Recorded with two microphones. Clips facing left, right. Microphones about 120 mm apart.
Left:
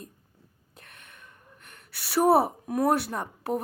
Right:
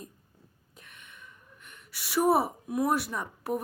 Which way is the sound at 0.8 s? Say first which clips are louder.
Even; 60° left (ahead or behind).